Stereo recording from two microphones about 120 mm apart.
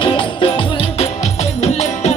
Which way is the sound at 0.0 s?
45° left (ahead or behind).